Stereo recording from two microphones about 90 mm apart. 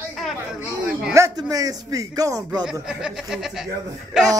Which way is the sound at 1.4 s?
45° right (ahead or behind).